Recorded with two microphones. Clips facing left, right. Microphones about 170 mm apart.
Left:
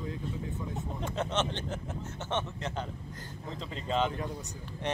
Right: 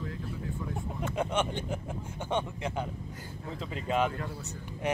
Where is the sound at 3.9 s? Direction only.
10° right (ahead or behind).